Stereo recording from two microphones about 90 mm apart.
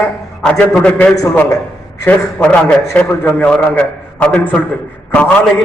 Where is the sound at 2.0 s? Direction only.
15° left (ahead or behind).